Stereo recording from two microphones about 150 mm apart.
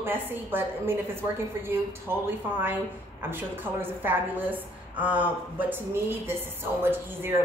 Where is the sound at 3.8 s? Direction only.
15° right (ahead or behind).